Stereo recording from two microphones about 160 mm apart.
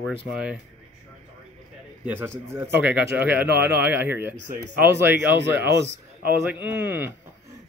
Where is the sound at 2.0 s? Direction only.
15° right (ahead or behind).